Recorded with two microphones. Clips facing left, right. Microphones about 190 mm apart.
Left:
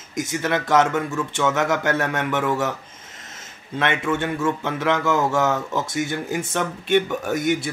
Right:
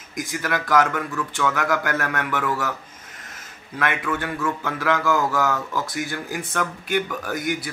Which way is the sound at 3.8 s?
25° left (ahead or behind).